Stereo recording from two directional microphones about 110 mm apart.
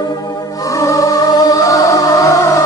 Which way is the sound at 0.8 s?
30° left (ahead or behind).